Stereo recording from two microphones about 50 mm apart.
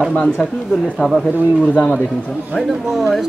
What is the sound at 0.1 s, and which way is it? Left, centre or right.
Speech, left.